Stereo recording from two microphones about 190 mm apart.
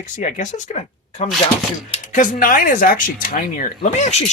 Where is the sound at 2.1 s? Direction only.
45° left (ahead or behind).